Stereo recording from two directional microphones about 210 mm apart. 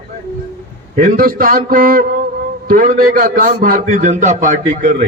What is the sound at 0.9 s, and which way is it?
A man's voice, 40° right (ahead or behind).